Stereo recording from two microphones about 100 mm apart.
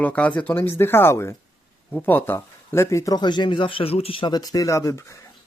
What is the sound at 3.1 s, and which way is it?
Speech, 50° left (ahead or behind).